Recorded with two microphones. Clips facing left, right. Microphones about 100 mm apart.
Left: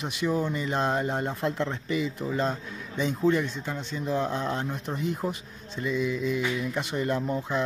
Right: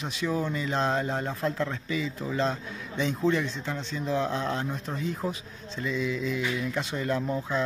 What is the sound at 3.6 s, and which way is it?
Speech, 15° left (ahead or behind).